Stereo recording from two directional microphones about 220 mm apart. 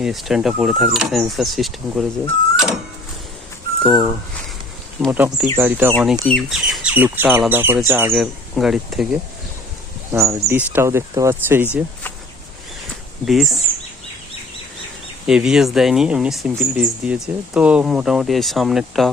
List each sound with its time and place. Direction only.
0.0 s speech: centre (ahead or behind)
5.1 s speech: 5° right (ahead or behind)
10.1 s speech: 10° right (ahead or behind)
13.2 s speech: centre (ahead or behind)
15.3 s speech: 5° right (ahead or behind)